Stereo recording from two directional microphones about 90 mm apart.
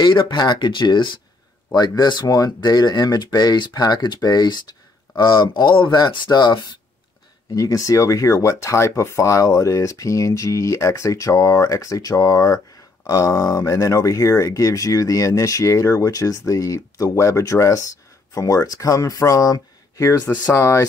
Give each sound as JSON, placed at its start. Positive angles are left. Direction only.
{"t": 0.0, "sound": "speech", "side_deg": 60}
{"t": 7.5, "sound": "speech", "side_deg": 40}
{"t": 20.5, "sound": "speech", "side_deg": 30}